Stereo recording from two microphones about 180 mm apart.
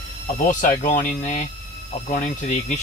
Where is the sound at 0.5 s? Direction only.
45° left (ahead or behind).